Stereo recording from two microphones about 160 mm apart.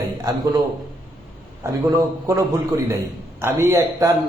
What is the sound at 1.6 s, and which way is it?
A man's voice, 20° right (ahead or behind).